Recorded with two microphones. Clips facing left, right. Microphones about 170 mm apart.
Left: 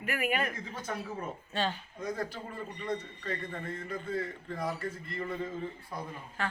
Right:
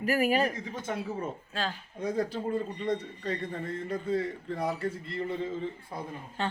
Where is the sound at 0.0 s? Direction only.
35° right (ahead or behind).